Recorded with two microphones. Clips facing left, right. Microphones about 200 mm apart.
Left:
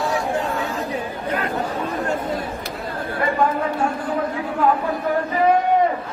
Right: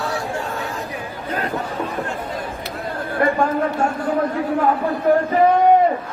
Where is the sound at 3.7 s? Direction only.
45° right (ahead or behind).